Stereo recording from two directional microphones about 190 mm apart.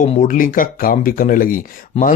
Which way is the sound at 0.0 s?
45° left (ahead or behind).